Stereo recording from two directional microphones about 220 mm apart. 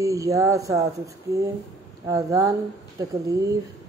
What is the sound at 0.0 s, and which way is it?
Speech, 15° right (ahead or behind).